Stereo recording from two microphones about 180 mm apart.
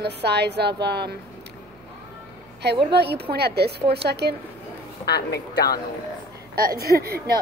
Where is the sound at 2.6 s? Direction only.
65° right (ahead or behind).